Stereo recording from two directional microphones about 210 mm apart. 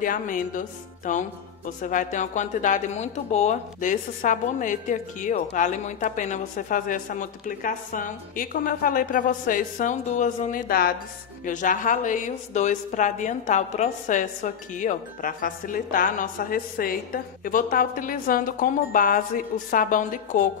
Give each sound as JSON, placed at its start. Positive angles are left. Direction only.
{"t": 0.0, "sound": "a woman's voice", "side_deg": 40}